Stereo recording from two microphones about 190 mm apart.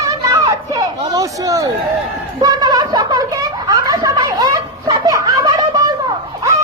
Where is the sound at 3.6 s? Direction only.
20° right (ahead or behind).